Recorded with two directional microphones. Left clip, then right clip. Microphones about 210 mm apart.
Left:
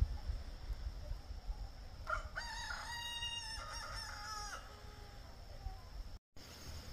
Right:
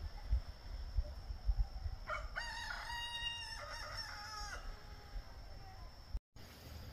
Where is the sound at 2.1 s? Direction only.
40° right (ahead or behind).